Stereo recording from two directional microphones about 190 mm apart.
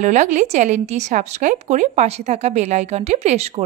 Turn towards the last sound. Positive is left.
turn(degrees=-35)  # may be behind; listen again after turning